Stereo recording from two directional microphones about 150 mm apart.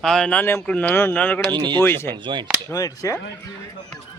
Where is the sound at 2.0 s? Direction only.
30° right (ahead or behind).